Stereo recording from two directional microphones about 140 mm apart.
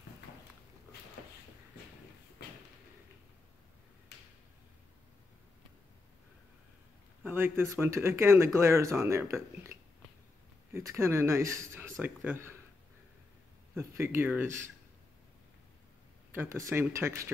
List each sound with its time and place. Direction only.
7.2 s speech: 15° right (ahead or behind)
13.7 s speech: 20° right (ahead or behind)
16.3 s speech: 20° right (ahead or behind)